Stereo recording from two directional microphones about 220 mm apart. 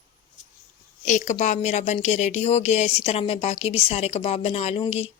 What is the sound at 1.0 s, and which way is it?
Speech, 35° left (ahead or behind).